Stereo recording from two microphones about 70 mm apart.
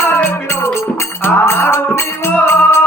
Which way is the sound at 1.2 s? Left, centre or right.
Left.